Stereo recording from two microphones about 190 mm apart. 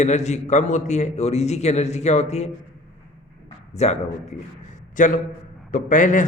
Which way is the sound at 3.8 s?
35° left (ahead or behind).